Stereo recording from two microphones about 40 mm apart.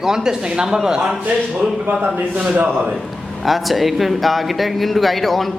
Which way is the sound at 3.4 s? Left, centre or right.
Centre.